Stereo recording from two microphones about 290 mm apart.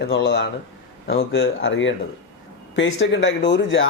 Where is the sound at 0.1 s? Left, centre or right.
Left.